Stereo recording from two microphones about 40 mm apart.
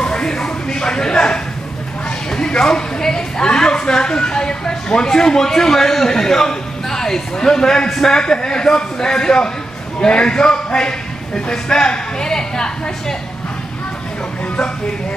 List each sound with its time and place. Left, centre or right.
0.0 s music: left
0.7 s a sound: centre
8.0 s a man's voice: centre